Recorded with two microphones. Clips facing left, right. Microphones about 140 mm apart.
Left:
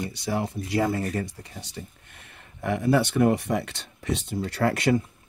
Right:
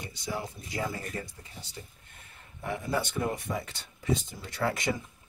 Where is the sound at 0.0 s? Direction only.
75° left (ahead or behind).